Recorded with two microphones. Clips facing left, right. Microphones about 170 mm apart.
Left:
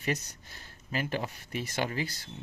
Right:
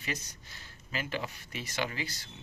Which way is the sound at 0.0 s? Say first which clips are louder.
Left 6 dB; 50° left (ahead or behind).